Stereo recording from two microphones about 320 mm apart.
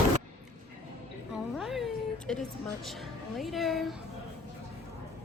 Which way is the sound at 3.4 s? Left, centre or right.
Centre.